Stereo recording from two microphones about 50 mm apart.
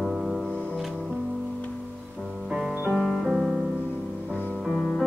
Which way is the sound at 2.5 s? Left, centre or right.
Centre.